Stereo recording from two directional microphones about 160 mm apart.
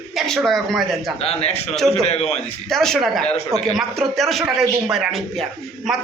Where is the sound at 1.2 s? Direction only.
40° left (ahead or behind).